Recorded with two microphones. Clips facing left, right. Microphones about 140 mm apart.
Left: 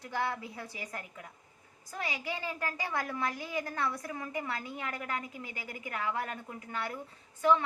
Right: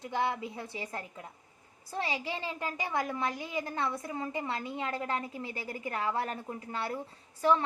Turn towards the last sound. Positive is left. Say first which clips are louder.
# even
turn(degrees=-35)  # may be behind; listen again after turning